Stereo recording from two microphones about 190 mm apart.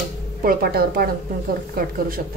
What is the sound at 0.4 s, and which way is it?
A woman's voice, 50° right (ahead or behind).